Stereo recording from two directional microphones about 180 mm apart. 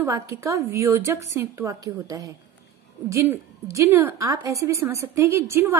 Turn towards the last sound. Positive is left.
turn(degrees=-15)  # may be behind; listen again after turning